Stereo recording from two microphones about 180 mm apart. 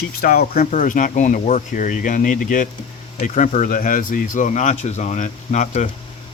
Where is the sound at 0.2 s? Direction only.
50° left (ahead or behind).